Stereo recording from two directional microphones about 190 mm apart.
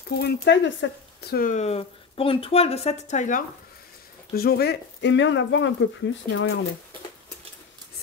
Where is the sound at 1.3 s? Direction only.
40° left (ahead or behind).